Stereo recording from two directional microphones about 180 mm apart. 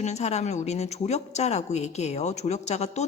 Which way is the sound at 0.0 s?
40° left (ahead or behind).